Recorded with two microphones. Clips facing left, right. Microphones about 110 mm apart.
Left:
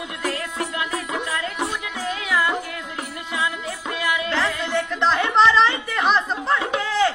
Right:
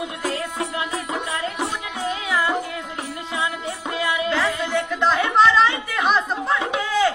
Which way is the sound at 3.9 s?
25° right (ahead or behind).